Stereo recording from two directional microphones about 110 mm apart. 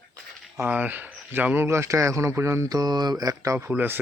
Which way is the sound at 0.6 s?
15° right (ahead or behind).